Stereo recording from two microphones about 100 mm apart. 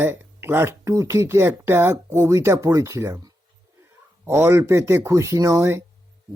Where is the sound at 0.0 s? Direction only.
20° right (ahead or behind).